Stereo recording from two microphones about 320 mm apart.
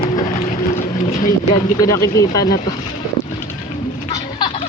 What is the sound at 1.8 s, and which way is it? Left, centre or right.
Speech, centre.